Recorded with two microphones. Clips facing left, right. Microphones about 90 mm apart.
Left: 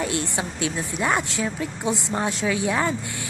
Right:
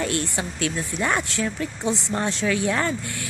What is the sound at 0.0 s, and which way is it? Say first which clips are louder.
A woman's voice: even; 15° left (ahead or behind).